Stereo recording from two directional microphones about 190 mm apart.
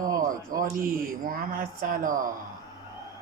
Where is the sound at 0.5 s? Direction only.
45° right (ahead or behind).